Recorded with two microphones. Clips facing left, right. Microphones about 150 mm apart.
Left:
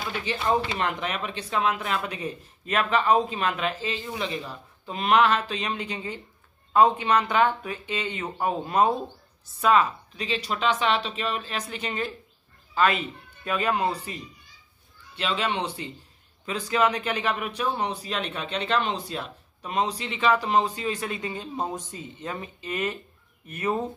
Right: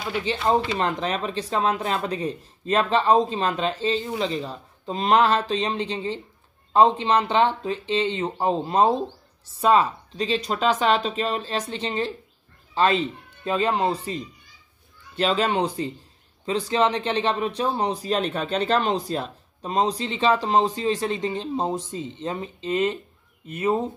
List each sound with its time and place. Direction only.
0.1 s a man's voice: 25° right (ahead or behind)
15.1 s a man's voice: 40° right (ahead or behind)
16.4 s a man's voice: 30° right (ahead or behind)